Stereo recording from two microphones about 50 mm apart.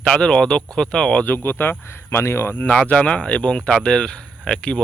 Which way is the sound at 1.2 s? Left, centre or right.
Left.